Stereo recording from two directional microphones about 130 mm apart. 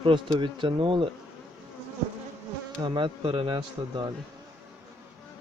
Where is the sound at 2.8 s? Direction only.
40° right (ahead or behind).